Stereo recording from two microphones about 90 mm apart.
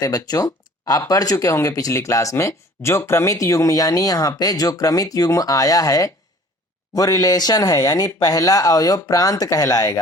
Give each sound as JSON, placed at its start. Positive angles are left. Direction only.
{"t": 0.0, "sound": "speech", "side_deg": 40}